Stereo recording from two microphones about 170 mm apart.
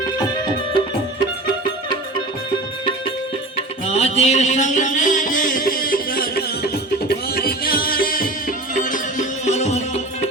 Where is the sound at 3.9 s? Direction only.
40° left (ahead or behind).